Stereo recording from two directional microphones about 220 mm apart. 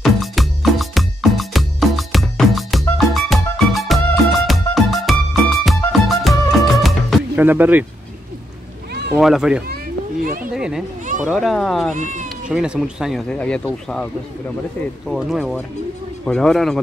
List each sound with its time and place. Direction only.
0.0 s music: centre (ahead or behind)
9.1 s speech: 5° right (ahead or behind)
11.9 s speech: 35° right (ahead or behind)
12.4 s speech: 5° right (ahead or behind)
15.0 s speech: centre (ahead or behind)